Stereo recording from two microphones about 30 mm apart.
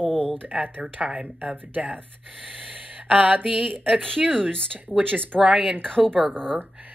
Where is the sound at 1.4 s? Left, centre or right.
Right.